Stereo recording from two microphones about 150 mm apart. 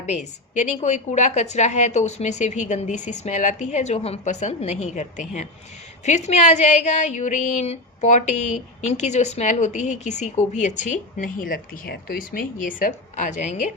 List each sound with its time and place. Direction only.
0.0 s a woman's voice: 50° left (ahead or behind)